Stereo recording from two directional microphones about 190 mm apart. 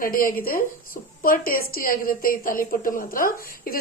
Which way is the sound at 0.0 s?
50° left (ahead or behind).